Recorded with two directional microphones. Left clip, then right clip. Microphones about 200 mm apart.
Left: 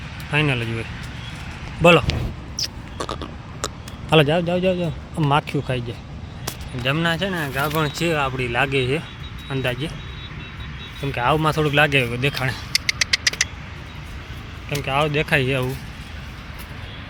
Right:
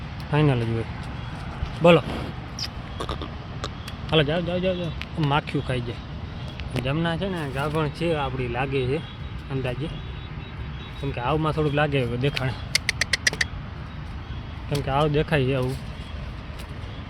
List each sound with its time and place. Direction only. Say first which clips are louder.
0.3 s speech: left 2 dB; 10° right (ahead or behind)
1.8 s speech: left 3 dB; 5° left (ahead or behind)
2.6 s a sound: left 6 dB; 20° left (ahead or behind)
4.1 s a man's voice: left 6 dB; 30° left (ahead or behind)
5.2 s speech: left 4 dB; 15° left (ahead or behind)
6.8 s speech: left 7 dB; 10° left (ahead or behind)
7.3 s speech: left 5 dB; 20° left (ahead or behind)
11.0 s speech: left 6 dB; 15° left (ahead or behind)
12.4 s a sound: left 3 dB; centre (ahead or behind)
14.8 s speech: left 3 dB; 15° right (ahead or behind)